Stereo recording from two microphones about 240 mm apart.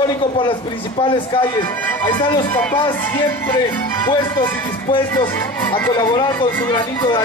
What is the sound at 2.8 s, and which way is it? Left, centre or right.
Music, centre.